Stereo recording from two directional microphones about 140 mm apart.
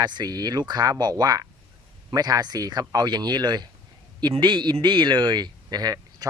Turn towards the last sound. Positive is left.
turn(degrees=-25)  # may be behind; listen again after turning